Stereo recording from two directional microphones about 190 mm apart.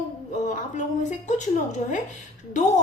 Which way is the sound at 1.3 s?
40° left (ahead or behind).